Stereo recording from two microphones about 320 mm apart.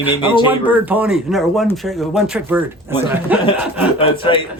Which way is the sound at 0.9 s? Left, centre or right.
Centre.